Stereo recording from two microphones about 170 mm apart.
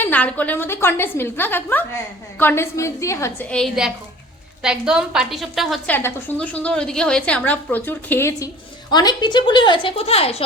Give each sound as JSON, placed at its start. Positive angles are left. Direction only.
{"t": 0.0, "sound": "a woman's voice", "side_deg": 10}
{"t": 3.5, "sound": "a woman's voice", "side_deg": 0}
{"t": 5.9, "sound": "a woman's voice", "side_deg": 15}